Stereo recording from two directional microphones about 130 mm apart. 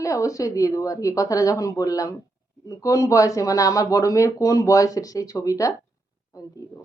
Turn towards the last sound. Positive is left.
turn(degrees=25)  # may be behind; listen again after turning